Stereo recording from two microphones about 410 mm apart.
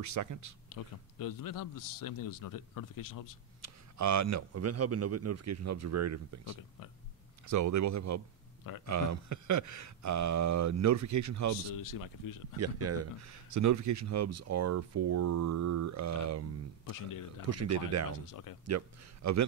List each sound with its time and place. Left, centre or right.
0.0 s speech: right
0.7 s a man's voice: left
3.6 s speech: right
11.7 s a man's voice: left
12.5 s speech: right
16.9 s a man's voice: left
17.5 s speech: right
18.2 s a man's voice: left
18.7 s speech: right